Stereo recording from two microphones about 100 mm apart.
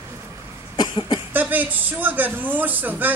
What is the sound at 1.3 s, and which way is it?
Speech, 20° right (ahead or behind).